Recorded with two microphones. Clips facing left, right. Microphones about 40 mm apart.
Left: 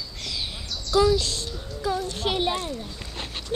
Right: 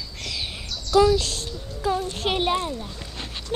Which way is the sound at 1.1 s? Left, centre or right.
Right.